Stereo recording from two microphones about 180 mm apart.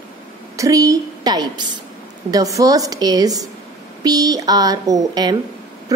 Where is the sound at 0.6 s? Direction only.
20° right (ahead or behind).